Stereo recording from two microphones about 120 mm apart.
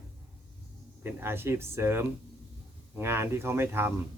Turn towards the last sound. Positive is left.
turn(degrees=-20)  # may be behind; listen again after turning